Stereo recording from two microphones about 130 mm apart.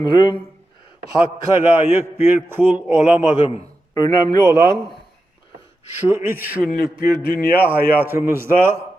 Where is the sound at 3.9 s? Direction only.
35° left (ahead or behind).